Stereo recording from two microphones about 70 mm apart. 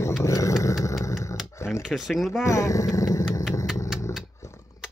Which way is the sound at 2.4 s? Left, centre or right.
Left.